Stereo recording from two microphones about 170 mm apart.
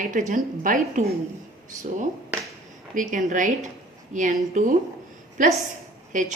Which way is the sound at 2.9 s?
50° right (ahead or behind).